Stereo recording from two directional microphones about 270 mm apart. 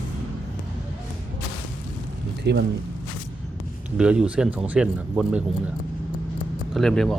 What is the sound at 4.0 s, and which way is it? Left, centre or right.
Speech, centre.